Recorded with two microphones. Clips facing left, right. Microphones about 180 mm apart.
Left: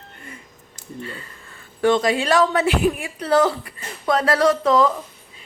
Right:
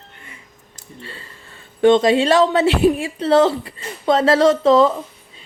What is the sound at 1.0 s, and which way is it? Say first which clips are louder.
Speech: left 3 dB; 30° right (ahead or behind).